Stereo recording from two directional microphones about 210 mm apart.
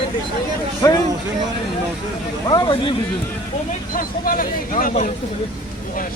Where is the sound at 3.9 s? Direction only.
40° left (ahead or behind).